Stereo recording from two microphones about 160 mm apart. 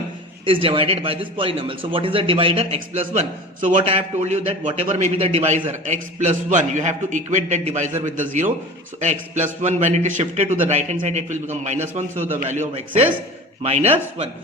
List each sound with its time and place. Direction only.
0.4 s speech: 35° right (ahead or behind)
3.1 s a man's voice: 50° right (ahead or behind)
3.8 s a man's voice: 40° right (ahead or behind)
12.1 s a man's voice: 15° right (ahead or behind)
12.5 s a man's voice: 45° right (ahead or behind)